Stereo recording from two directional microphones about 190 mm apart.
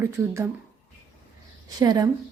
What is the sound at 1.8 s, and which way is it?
Speech, 20° right (ahead or behind).